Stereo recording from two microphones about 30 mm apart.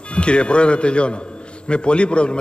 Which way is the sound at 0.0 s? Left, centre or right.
Left.